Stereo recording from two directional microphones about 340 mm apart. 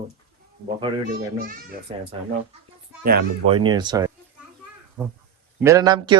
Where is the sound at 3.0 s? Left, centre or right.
Right.